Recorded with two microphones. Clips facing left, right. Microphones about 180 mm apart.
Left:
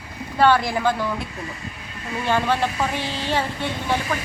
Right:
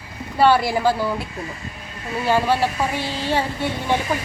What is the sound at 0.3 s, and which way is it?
Speech, 10° right (ahead or behind).